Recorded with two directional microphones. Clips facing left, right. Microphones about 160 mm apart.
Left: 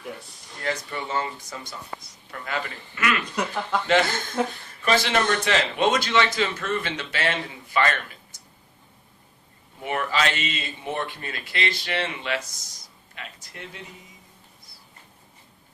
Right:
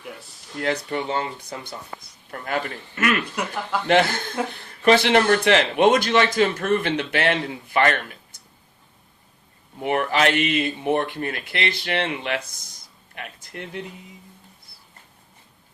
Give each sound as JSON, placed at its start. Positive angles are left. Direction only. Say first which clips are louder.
{"t": 0.6, "sound": "speech", "louder": "right 5 dB", "side_deg": -60}
{"t": 2.3, "sound": "speech", "louder": "right 4 dB", "side_deg": -50}
{"t": 3.4, "sound": "a woman's voice", "louder": "even", "side_deg": -10}
{"t": 4.9, "sound": "speech", "louder": "right 6 dB", "side_deg": -65}
{"t": 9.8, "sound": "speech", "louder": "right 5 dB", "side_deg": -55}